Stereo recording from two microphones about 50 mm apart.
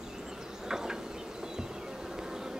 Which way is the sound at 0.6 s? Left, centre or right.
Centre.